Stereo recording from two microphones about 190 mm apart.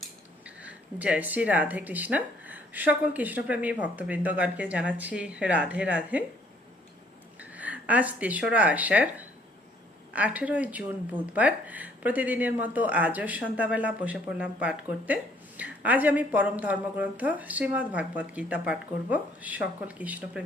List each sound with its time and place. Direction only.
0.0 s speech: 5° right (ahead or behind)
7.3 s speech: 10° right (ahead or behind)